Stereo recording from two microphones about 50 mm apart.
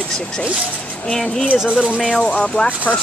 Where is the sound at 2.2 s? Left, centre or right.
Left.